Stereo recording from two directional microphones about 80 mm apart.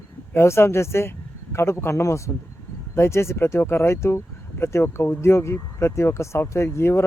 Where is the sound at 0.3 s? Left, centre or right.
Left.